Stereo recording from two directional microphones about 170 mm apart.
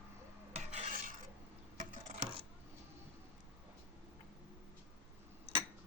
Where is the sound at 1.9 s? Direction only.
45° right (ahead or behind).